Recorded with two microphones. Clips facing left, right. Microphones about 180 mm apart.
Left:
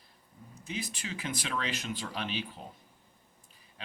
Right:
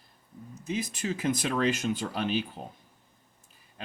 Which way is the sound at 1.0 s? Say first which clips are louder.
Right 9 dB; 45° right (ahead or behind).